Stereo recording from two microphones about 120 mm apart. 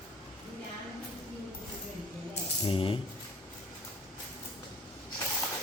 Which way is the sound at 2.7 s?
50° left (ahead or behind).